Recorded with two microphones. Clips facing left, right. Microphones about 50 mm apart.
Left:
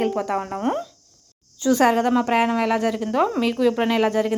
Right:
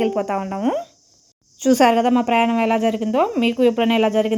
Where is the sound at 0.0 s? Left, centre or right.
Right.